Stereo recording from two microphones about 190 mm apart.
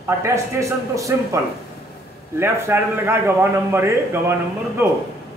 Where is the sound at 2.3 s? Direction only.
15° right (ahead or behind).